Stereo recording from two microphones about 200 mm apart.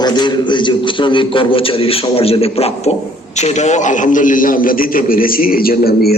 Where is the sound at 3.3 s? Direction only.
35° left (ahead or behind).